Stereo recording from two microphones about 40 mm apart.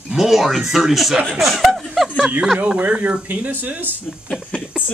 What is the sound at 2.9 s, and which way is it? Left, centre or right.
Speech, right.